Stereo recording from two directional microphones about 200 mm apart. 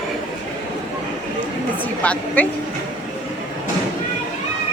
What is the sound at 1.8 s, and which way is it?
Speech, 5° left (ahead or behind).